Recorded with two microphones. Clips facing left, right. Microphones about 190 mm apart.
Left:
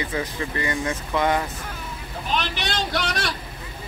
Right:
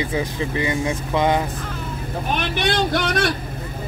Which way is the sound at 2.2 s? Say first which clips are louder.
Right 4 dB; 55° right (ahead or behind).